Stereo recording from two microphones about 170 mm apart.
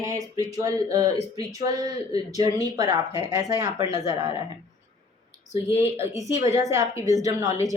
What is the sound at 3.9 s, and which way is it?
Speech, 40° left (ahead or behind).